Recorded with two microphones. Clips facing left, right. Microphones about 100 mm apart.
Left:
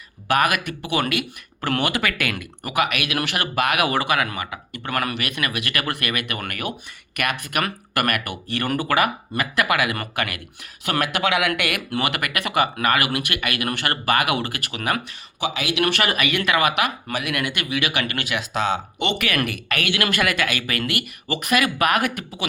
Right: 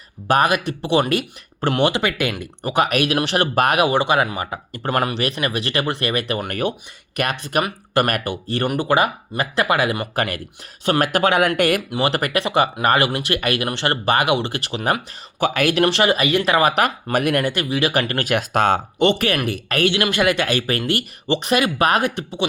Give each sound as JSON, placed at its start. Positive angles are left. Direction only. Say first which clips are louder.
{"t": 0.3, "sound": "speech", "louder": "right 3 dB", "side_deg": -30}
{"t": 3.8, "sound": "speech", "louder": "right 4 dB", "side_deg": -25}
{"t": 11.8, "sound": "speech", "louder": "right 2 dB", "side_deg": -20}
{"t": 12.0, "sound": "speech", "louder": "right 8 dB", "side_deg": -30}
{"t": 15.4, "sound": "speech", "louder": "right 7 dB", "side_deg": -50}
{"t": 15.8, "sound": "speech", "louder": "right 3 dB", "side_deg": -25}